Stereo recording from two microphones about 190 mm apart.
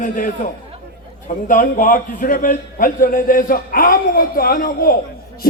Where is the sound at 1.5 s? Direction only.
45° left (ahead or behind).